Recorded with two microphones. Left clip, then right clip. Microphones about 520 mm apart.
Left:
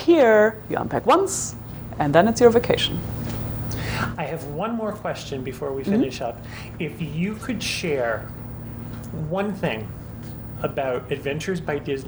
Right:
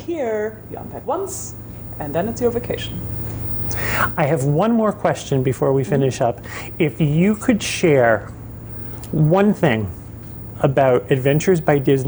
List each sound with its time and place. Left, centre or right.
0.0 s a woman's voice: left
3.7 s speech: right
9.3 s speech: right